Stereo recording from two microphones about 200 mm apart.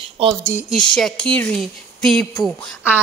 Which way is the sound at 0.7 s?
5° left (ahead or behind).